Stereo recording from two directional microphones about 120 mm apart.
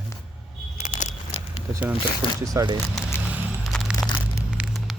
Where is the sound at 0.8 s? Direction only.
85° left.